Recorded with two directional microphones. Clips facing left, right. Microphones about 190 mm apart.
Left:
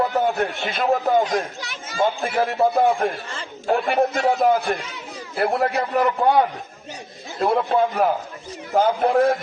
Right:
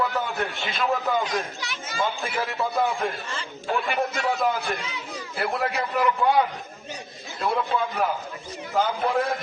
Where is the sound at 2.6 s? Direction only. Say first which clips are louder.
Left 7 dB; 60° left (ahead or behind).